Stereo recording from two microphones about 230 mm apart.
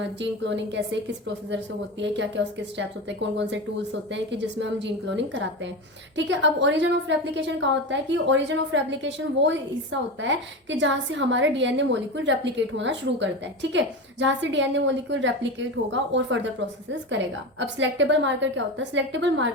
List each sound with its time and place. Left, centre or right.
0.2 s a woman's voice: right